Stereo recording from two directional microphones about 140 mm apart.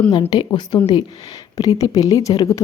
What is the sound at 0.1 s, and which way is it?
Speech, 30° left (ahead or behind).